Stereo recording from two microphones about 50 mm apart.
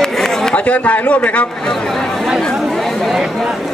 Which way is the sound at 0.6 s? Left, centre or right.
Left.